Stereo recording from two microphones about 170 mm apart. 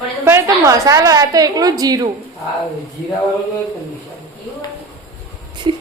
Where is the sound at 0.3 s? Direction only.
15° right (ahead or behind).